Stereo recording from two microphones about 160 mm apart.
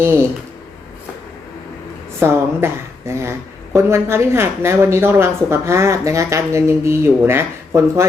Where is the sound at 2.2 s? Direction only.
15° right (ahead or behind).